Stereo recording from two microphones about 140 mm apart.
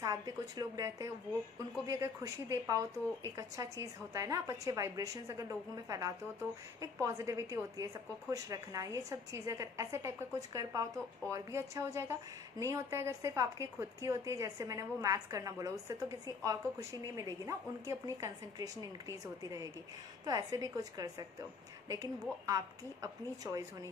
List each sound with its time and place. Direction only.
0.0 s a woman's voice: 25° right (ahead or behind)